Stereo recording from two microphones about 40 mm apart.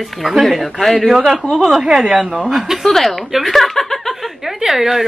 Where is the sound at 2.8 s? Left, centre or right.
Centre.